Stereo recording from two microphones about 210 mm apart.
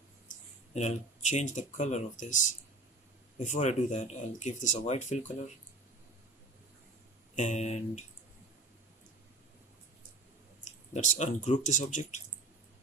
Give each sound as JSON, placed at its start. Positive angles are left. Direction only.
{"t": 0.7, "sound": "speech", "side_deg": 35}
{"t": 7.3, "sound": "speech", "side_deg": 35}
{"t": 10.6, "sound": "speech", "side_deg": 35}